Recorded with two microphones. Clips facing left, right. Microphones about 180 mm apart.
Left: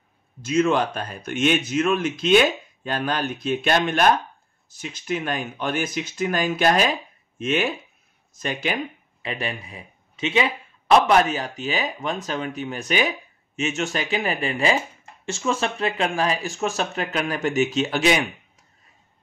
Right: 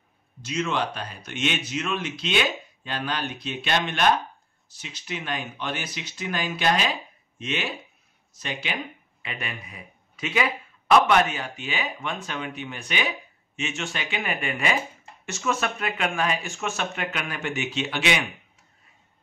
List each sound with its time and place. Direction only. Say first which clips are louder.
0.4 s a man's voice: left 7 dB; 50° left (ahead or behind)